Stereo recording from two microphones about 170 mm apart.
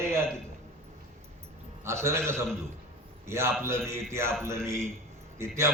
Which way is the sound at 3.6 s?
15° right (ahead or behind).